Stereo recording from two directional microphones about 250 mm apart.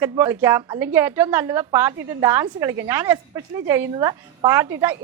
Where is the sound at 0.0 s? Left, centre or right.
Centre.